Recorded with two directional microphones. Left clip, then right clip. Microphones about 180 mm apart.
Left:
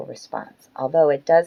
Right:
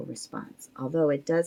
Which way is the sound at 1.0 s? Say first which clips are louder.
Left 9 dB; 20° right (ahead or behind).